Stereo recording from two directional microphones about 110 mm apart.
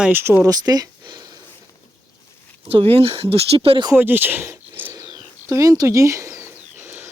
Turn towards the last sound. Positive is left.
turn(degrees=-15)  # may be behind; listen again after turning